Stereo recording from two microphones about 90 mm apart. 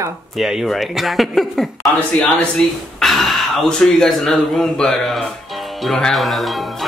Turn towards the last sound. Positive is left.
turn(degrees=0)  # may be behind; listen again after turning